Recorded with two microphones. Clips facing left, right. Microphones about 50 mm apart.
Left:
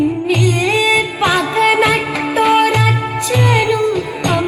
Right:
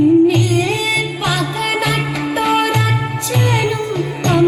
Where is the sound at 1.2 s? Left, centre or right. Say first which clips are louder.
Left 6 dB; left.